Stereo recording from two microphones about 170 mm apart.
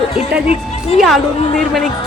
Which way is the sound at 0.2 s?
40° left (ahead or behind).